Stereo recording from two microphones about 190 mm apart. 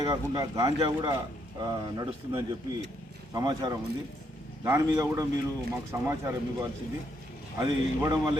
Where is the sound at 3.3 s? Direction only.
20° right (ahead or behind).